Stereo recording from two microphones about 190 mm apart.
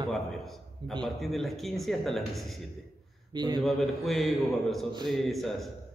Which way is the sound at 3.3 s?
20° right (ahead or behind).